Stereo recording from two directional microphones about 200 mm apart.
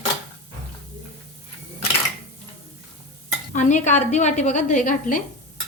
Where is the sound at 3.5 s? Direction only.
40° left (ahead or behind).